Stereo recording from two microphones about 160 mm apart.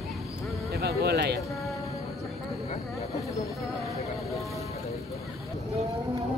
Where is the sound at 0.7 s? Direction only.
85° right.